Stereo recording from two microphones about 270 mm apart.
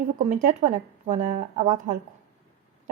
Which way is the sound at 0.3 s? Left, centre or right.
Right.